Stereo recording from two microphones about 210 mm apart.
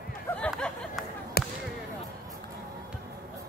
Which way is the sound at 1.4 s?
45° left (ahead or behind).